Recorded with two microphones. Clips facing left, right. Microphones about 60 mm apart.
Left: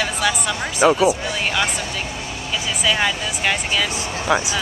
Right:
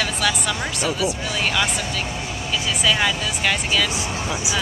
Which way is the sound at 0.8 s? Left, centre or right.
Left.